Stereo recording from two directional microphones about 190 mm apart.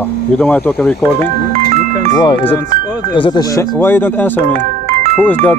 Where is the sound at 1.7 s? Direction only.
40° right (ahead or behind).